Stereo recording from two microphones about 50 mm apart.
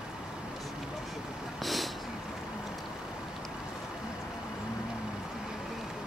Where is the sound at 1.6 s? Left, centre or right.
Centre.